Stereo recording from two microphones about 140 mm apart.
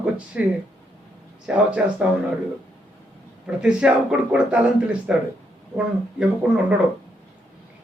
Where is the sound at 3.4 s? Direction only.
5° right (ahead or behind).